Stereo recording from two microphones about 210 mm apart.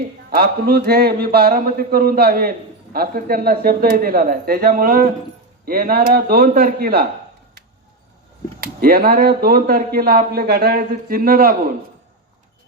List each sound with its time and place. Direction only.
0.3 s a man's voice: 50° right (ahead or behind)
8.6 s a man's voice: 45° right (ahead or behind)